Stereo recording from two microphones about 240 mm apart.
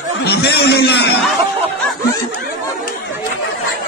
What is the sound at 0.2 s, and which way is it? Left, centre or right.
Speech, left.